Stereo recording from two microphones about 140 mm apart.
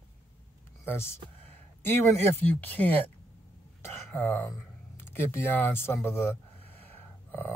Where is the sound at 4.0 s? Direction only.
15° left (ahead or behind).